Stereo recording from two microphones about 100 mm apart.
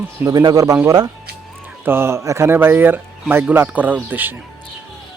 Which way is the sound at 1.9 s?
25° right (ahead or behind).